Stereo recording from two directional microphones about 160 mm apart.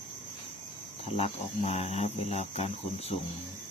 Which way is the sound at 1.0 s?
40° left (ahead or behind).